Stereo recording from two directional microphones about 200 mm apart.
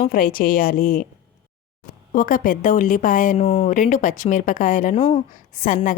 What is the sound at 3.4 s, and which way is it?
Speech, 30° left (ahead or behind).